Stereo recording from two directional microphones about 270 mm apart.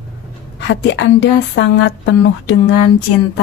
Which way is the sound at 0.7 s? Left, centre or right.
Left.